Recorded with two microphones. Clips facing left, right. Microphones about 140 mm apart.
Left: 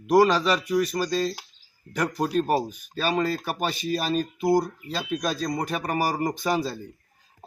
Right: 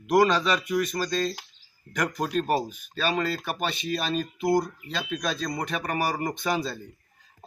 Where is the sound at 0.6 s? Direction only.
35° left (ahead or behind).